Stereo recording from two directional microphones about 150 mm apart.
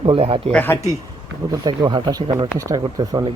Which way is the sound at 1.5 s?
30° right (ahead or behind).